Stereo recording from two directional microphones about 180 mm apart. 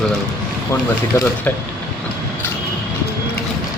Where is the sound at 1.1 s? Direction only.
15° left (ahead or behind).